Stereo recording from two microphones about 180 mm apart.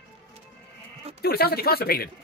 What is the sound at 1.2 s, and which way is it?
Speech, 60° left (ahead or behind).